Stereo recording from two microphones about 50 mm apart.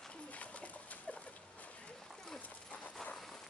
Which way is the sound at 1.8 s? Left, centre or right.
Centre.